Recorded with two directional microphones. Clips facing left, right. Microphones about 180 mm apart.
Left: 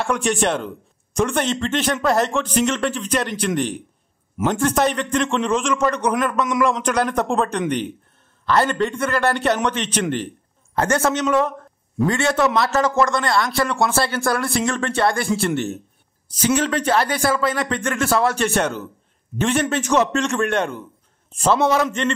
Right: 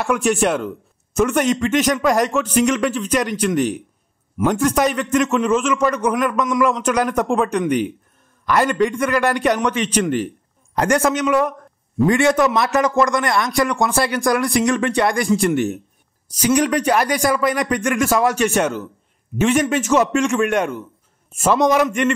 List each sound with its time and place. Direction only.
0.0 s a man's voice: 5° right (ahead or behind)